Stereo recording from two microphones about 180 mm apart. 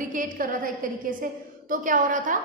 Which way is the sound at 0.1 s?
50° right (ahead or behind).